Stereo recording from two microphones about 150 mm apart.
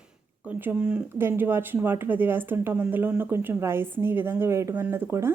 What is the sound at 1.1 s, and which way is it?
Speech, 15° right (ahead or behind).